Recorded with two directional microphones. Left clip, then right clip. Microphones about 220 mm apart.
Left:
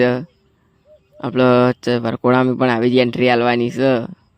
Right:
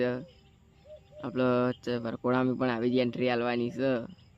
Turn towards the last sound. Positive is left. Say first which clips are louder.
# left 13 dB
turn(degrees=40)  # may be behind; listen again after turning